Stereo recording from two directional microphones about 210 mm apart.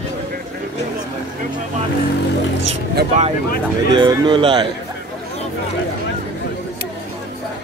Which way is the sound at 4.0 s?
20° right (ahead or behind).